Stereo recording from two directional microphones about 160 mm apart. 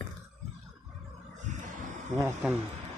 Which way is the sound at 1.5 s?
50° right (ahead or behind).